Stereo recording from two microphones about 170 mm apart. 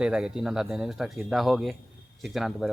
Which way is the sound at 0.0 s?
5° right (ahead or behind).